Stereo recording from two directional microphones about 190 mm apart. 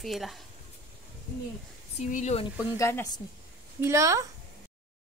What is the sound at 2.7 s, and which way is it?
Speech, 15° left (ahead or behind).